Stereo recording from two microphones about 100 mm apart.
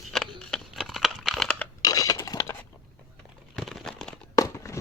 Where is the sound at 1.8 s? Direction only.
40° left (ahead or behind).